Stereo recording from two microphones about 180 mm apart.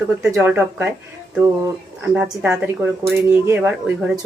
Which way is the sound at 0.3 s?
10° right (ahead or behind).